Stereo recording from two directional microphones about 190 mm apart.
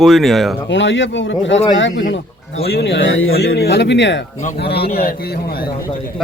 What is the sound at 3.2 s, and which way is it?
Speech, 60° left (ahead or behind).